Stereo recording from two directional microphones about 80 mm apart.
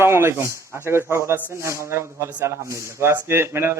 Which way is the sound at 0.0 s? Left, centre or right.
Right.